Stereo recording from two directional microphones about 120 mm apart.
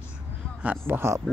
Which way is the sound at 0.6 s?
15° right (ahead or behind).